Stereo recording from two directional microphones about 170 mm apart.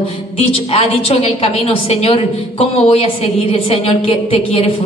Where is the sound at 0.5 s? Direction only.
35° left (ahead or behind).